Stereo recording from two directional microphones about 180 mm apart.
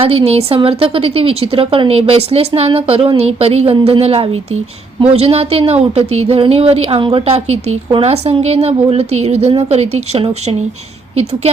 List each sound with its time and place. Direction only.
0.0 s a woman's voice: 30° right (ahead or behind)